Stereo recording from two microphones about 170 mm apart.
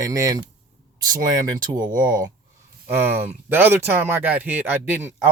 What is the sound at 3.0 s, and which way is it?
Speech, 15° right (ahead or behind).